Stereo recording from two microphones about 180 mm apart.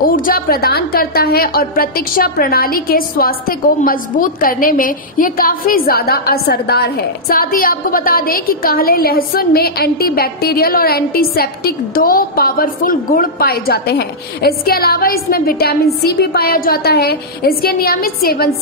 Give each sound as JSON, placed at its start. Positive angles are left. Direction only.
{"t": 0.1, "sound": "a woman's voice", "side_deg": 50}